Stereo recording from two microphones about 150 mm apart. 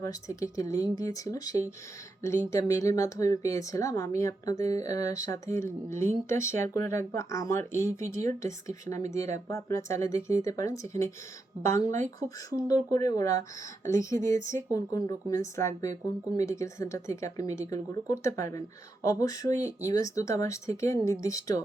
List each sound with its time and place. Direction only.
0.0 s speech: 20° left (ahead or behind)
7.7 s speech: 60° right (ahead or behind)
8.4 s speech: 20° left (ahead or behind)
11.9 s speech: 55° right (ahead or behind)
12.5 s speech: 25° left (ahead or behind)